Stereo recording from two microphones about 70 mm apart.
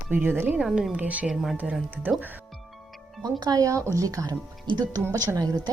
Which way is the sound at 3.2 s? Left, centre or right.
Right.